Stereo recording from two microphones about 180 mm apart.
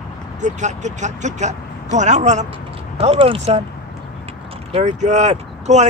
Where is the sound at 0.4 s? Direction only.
40° right (ahead or behind).